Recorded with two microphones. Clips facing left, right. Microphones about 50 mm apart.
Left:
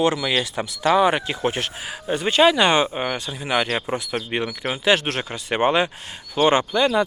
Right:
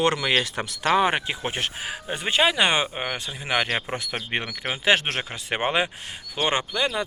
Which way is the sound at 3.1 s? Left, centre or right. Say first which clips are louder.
Left 3 dB; right.